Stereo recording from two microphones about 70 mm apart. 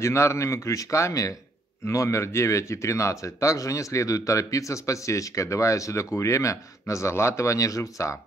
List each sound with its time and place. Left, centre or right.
0.0 s speech: left